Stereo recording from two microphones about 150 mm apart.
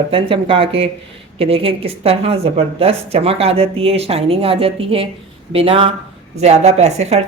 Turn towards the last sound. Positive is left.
turn(degrees=-45)  # may be behind; listen again after turning